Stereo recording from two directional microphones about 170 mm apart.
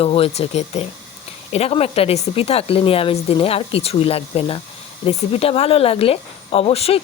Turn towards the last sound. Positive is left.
turn(degrees=35)  # may be behind; listen again after turning